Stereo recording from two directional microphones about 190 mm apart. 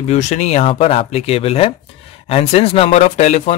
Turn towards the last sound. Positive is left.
turn(degrees=35)  # may be behind; listen again after turning